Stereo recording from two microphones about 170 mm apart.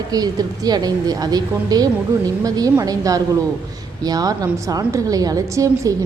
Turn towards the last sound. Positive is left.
turn(degrees=-20)  # may be behind; listen again after turning